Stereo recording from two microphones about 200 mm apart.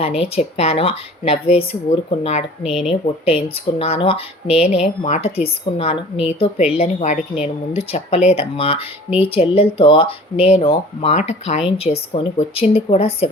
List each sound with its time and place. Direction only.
0.0 s a woman's voice: 30° left (ahead or behind)